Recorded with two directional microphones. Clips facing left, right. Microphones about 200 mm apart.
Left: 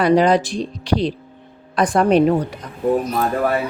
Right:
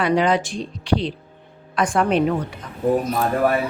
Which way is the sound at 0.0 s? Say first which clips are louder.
Left 4 dB; 40° left (ahead or behind).